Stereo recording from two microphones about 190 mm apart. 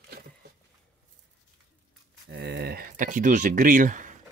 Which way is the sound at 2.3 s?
60° right (ahead or behind).